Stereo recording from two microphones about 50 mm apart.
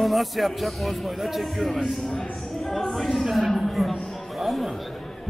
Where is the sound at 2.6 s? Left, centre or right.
Centre.